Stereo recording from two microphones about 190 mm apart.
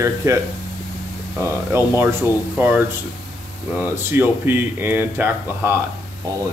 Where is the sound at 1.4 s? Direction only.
10° right (ahead or behind).